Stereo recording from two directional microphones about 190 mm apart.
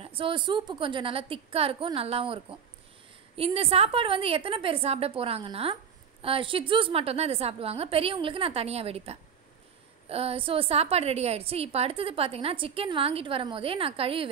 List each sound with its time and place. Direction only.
0.0 s a woman's voice: 30° right (ahead or behind)